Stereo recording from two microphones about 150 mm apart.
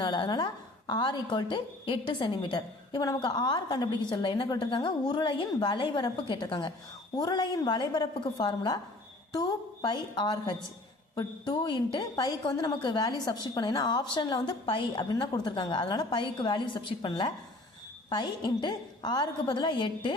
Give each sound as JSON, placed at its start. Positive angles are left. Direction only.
{"t": 0.0, "sound": "a woman's voice", "side_deg": 30}